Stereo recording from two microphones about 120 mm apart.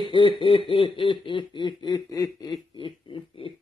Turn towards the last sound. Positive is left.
turn(degrees=50)  # may be behind; listen again after turning